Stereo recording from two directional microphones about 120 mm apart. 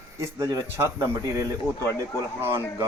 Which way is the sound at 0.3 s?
25° right (ahead or behind).